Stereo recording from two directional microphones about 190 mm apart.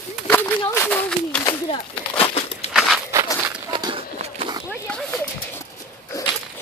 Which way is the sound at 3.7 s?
25° right (ahead or behind).